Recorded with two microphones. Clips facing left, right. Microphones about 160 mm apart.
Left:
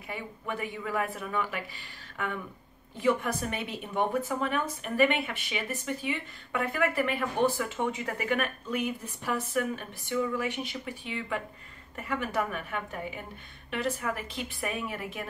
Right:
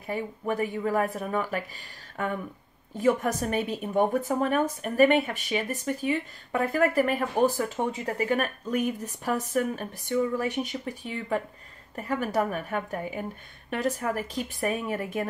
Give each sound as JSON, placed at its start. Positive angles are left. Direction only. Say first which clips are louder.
{"t": 0.0, "sound": "a woman's voice", "louder": "right 7 dB", "side_deg": -40}